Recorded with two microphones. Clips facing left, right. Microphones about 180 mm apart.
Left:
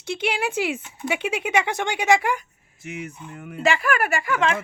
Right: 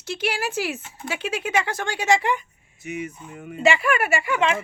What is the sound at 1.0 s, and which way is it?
Speech, 20° left (ahead or behind).